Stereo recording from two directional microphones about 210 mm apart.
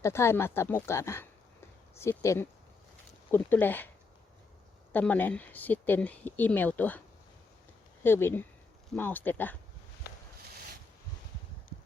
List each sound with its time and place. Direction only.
0.0 s speech: 10° left (ahead or behind)
4.9 s speech: 10° left (ahead or behind)
8.0 s speech: 10° left (ahead or behind)
10.0 s a sound: 50° left (ahead or behind)